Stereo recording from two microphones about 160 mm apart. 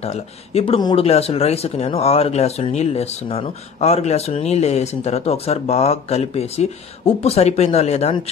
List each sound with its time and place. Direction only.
0.0 s speech: 40° left (ahead or behind)
0.7 s speech: 25° left (ahead or behind)
1.0 s speech: 40° left (ahead or behind)